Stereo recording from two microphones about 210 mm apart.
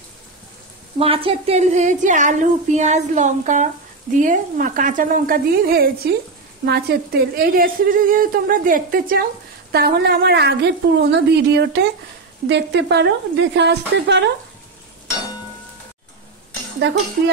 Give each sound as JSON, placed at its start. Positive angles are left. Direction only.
{"t": 0.9, "sound": "a woman's voice", "side_deg": -25}